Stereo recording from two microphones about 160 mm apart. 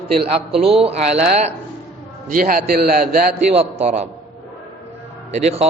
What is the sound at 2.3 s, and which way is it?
Speech, 65° right (ahead or behind).